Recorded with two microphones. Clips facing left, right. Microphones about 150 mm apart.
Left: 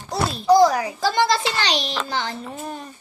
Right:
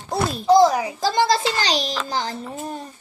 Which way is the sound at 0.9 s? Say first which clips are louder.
Right 1 dB; 35° right (ahead or behind).